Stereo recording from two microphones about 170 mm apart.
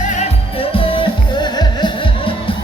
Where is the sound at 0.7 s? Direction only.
30° left (ahead or behind).